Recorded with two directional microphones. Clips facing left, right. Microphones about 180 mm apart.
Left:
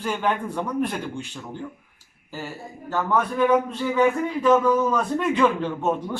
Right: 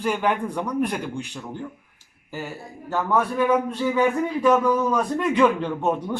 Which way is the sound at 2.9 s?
10° right (ahead or behind).